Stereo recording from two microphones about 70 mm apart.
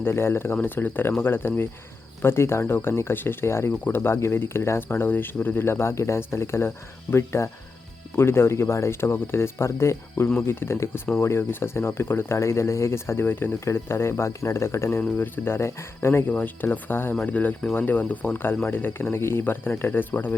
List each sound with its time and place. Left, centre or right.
0.0 s speech: left
16.3 s speech: left